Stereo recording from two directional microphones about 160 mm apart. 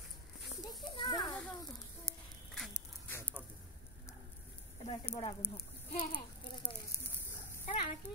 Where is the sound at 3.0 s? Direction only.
15° left (ahead or behind).